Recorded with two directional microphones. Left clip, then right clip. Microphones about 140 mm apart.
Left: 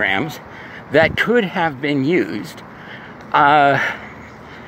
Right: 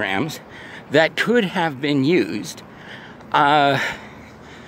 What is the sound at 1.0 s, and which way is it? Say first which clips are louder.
Speech: left 3 dB; 55° right (ahead or behind).